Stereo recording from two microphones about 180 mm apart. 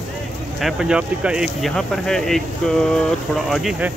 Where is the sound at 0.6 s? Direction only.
Centre (ahead or behind).